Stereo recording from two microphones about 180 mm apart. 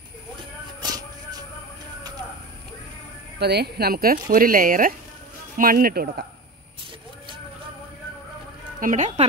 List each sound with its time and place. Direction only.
3.3 s speech: 65° right (ahead or behind)
8.7 s speech: 45° right (ahead or behind)